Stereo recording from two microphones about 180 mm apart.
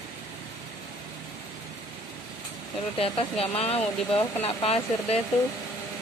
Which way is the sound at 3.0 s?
30° left (ahead or behind).